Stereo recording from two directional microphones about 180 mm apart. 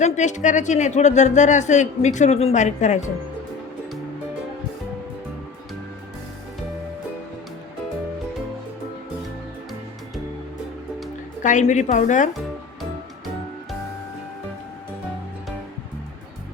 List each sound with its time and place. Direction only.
0.0 s speech: 40° left (ahead or behind)
11.4 s speech: 40° left (ahead or behind)